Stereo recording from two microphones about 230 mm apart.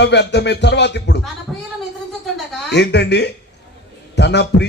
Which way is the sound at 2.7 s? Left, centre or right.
Left.